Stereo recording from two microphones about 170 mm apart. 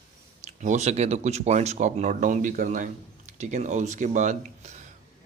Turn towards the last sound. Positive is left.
turn(degrees=-45)  # may be behind; listen again after turning